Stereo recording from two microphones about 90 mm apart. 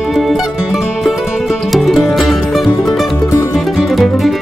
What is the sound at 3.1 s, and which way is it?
Music, 35° left (ahead or behind).